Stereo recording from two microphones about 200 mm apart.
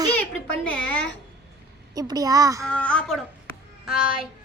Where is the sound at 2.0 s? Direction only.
20° right (ahead or behind).